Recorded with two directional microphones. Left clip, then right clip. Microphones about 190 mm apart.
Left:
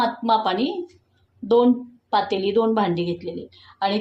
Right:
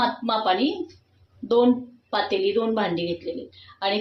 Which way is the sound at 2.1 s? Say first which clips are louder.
Left 2 dB; 60° left (ahead or behind).